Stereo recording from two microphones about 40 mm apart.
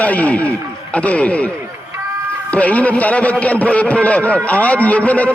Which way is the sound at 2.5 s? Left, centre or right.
Left.